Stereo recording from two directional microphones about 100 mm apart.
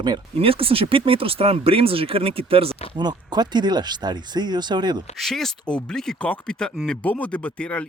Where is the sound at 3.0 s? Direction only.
45° right (ahead or behind).